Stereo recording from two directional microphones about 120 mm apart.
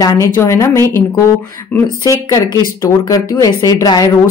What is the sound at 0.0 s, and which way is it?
Speech, 25° left (ahead or behind).